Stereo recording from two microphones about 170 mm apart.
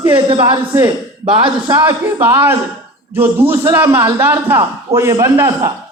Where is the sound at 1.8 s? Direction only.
10° right (ahead or behind).